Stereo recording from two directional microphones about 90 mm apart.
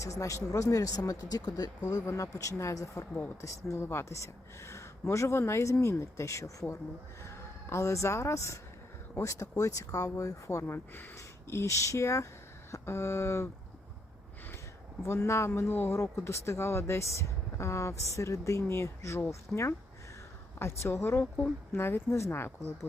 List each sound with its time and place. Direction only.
0.0 s speech: 35° left (ahead or behind)
15.0 s speech: 30° left (ahead or behind)